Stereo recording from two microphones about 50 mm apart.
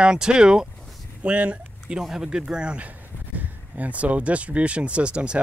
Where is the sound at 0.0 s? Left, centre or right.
Centre.